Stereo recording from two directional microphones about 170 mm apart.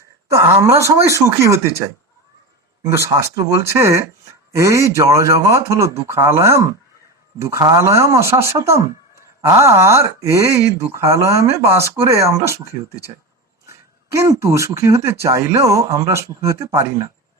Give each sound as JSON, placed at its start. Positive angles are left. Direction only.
{"t": 0.3, "sound": "speech", "side_deg": -15}
{"t": 2.8, "sound": "speech", "side_deg": -15}
{"t": 13.7, "sound": "speech", "side_deg": -15}